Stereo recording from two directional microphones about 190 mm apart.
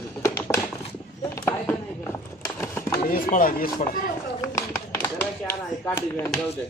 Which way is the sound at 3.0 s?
45° left (ahead or behind).